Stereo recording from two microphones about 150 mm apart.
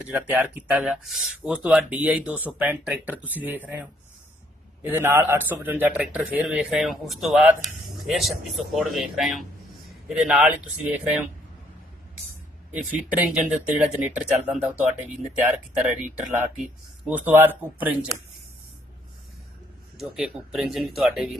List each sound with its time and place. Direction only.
0.1 s speech: 10° right (ahead or behind)
12.7 s speech: 10° right (ahead or behind)
20.0 s speech: centre (ahead or behind)